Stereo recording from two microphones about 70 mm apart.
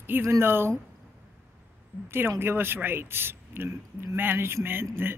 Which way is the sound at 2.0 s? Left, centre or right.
Right.